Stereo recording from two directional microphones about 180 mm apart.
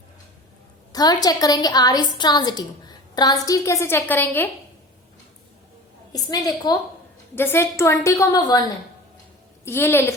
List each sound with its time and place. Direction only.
0.9 s a woman's voice: 20° left (ahead or behind)
6.1 s a woman's voice: 20° left (ahead or behind)
9.6 s a woman's voice: 15° left (ahead or behind)